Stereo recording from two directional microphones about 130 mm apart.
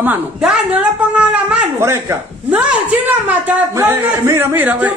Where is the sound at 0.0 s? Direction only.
10° right (ahead or behind).